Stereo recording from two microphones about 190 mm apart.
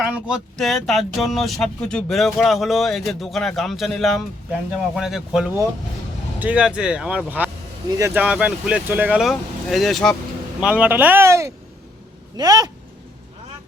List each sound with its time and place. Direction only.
0.0 s speech: 5° right (ahead or behind); by 12.7 s 20° right (ahead or behind)